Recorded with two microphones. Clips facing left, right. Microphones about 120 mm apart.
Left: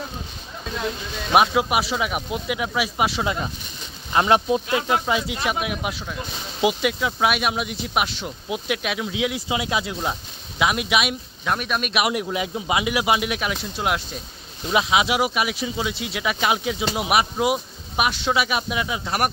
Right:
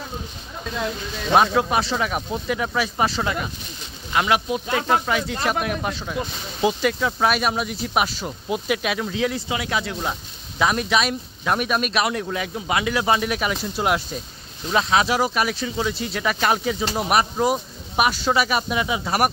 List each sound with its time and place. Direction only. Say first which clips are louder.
1.3 s speech: even; 10° left (ahead or behind)
4.1 s speech: left 3 dB; 30° left (ahead or behind)
4.7 s speech: right 1 dB; 15° left (ahead or behind)
9.5 s speech: left 1 dB; 20° left (ahead or behind)
10.6 s speech: right 1 dB; 5° left (ahead or behind)
12.0 s speech: left 1 dB; 15° left (ahead or behind); by 14.0 s 5° right (ahead or behind)
14.7 s speech: even; 10° left (ahead or behind)